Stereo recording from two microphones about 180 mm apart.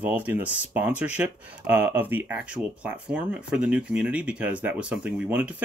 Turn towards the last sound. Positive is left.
turn(degrees=-5)  # may be behind; listen again after turning